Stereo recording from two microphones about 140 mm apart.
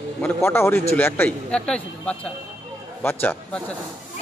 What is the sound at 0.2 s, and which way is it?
A man's voice, 15° left (ahead or behind).